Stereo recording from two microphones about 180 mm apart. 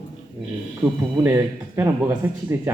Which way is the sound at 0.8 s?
10° right (ahead or behind).